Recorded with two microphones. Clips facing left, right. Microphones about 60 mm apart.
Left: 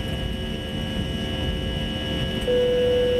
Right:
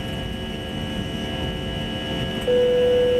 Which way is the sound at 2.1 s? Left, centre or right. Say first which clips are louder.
Right 2 dB; centre.